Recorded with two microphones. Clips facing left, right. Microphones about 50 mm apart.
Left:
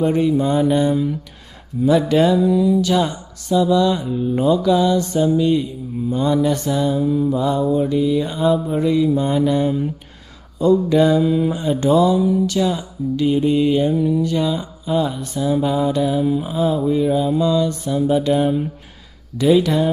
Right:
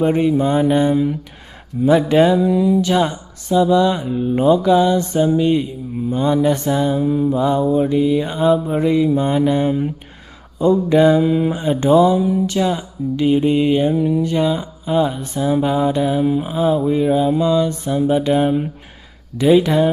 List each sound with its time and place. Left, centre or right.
0.0 s mantra: right